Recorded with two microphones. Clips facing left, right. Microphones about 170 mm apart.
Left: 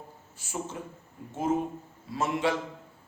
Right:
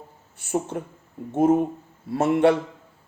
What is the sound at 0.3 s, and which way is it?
Speech, 60° right (ahead or behind).